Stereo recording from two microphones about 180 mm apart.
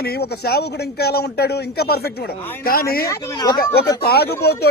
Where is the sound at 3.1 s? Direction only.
25° left (ahead or behind).